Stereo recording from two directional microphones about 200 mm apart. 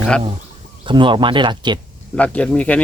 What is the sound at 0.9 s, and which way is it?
Speech, 25° right (ahead or behind).